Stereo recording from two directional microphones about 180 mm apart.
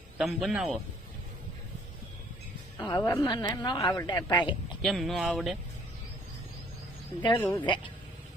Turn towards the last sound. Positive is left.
turn(degrees=15)  # may be behind; listen again after turning